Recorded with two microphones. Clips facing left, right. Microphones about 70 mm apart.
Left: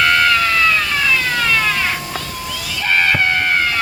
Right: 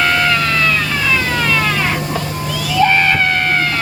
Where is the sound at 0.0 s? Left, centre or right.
Centre.